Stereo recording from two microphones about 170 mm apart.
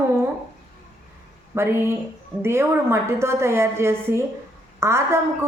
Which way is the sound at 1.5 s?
15° right (ahead or behind).